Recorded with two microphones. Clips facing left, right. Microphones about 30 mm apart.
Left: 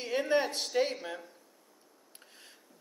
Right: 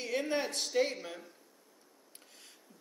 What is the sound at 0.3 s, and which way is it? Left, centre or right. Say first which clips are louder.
Speech: left 4 dB; left.